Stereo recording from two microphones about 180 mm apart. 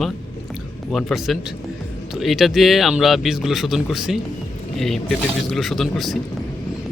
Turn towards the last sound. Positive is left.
turn(degrees=0)  # may be behind; listen again after turning